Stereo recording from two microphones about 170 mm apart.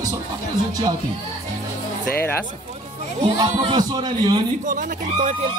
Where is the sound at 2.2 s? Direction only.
10° left (ahead or behind).